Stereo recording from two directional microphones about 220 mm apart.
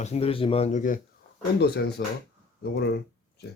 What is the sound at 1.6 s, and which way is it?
Speech, 50° left (ahead or behind).